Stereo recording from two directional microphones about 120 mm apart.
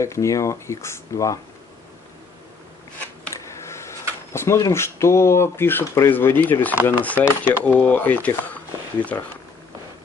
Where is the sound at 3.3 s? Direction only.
25° left (ahead or behind).